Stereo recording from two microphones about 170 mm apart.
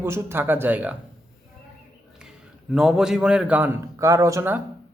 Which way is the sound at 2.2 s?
5° right (ahead or behind).